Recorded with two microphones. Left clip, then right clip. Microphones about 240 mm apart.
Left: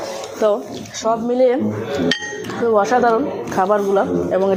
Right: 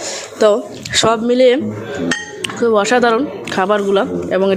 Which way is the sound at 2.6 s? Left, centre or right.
Right.